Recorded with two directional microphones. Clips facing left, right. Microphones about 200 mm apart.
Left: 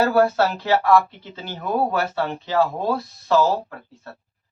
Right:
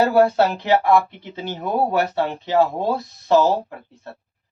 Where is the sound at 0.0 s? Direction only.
20° right (ahead or behind).